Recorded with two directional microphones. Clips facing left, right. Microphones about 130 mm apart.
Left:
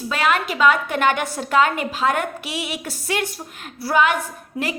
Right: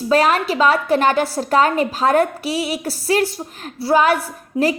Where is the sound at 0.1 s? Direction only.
40° right (ahead or behind).